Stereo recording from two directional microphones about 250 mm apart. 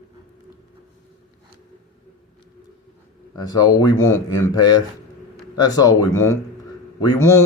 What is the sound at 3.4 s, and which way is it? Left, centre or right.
Speech, centre.